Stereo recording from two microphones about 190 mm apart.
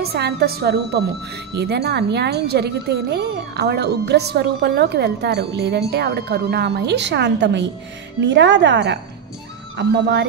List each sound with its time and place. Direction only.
0.0 s a woman's voice: 55° right (ahead or behind)